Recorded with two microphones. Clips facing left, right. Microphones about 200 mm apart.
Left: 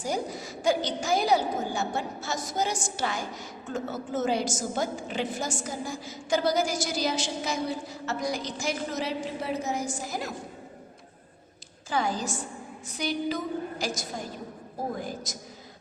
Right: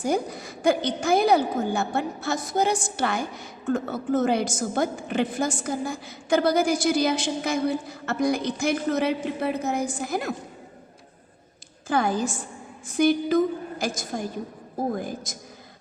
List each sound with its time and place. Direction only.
0.0 s a woman's voice: 55° right (ahead or behind)
11.9 s a woman's voice: 55° right (ahead or behind)